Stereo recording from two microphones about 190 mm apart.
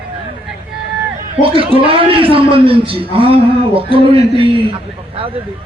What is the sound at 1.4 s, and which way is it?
Speech, 30° right (ahead or behind).